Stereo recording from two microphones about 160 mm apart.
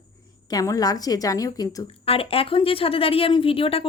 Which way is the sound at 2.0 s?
35° left (ahead or behind).